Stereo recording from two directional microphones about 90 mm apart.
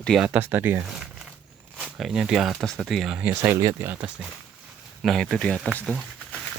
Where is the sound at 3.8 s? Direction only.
20° right (ahead or behind).